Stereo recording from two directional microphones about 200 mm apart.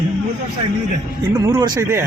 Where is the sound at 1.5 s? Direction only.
20° right (ahead or behind).